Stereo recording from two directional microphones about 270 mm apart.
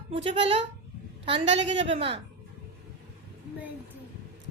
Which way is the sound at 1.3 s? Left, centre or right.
Right.